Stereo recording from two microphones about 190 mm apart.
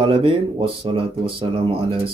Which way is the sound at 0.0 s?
30° right (ahead or behind).